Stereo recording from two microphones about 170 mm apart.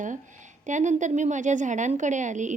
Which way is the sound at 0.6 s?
45° right (ahead or behind).